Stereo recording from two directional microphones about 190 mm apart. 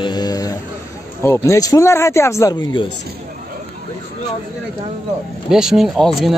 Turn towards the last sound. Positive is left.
turn(degrees=0)  # may be behind; listen again after turning